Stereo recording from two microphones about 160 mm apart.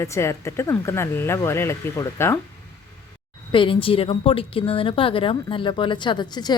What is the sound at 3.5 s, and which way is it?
A woman's voice, 35° left (ahead or behind).